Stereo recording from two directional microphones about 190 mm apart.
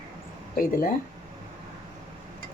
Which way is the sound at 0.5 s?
50° left (ahead or behind).